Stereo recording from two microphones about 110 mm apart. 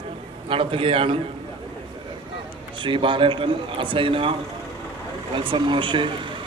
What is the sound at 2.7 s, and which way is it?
A man's voice, 50° right (ahead or behind).